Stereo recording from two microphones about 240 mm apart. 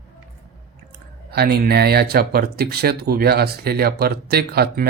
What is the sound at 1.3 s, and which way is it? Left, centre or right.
Speech, right.